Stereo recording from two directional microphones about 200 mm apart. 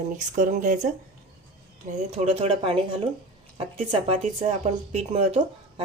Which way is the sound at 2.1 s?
30° right (ahead or behind).